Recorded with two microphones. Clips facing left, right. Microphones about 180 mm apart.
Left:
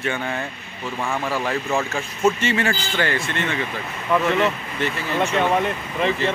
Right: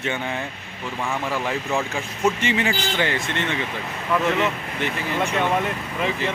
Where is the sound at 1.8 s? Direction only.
15° right (ahead or behind).